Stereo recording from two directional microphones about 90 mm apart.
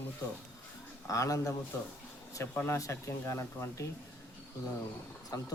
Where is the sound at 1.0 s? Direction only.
35° left (ahead or behind).